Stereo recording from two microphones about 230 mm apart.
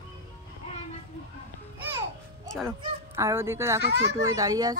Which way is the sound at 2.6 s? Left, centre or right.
Centre.